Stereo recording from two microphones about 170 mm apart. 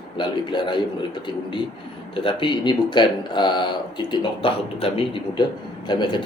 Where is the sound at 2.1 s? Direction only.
30° left (ahead or behind).